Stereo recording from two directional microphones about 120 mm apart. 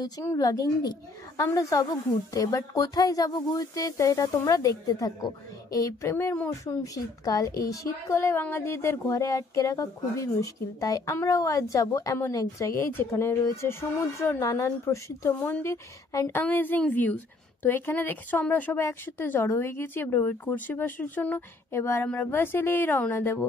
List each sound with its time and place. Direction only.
0.2 s a woman's voice: 25° left (ahead or behind)
6.6 s a woman's voice: 30° left (ahead or behind)